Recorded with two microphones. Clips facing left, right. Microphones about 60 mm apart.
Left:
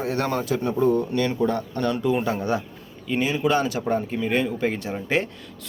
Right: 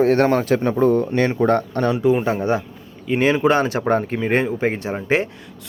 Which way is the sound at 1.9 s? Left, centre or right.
Centre.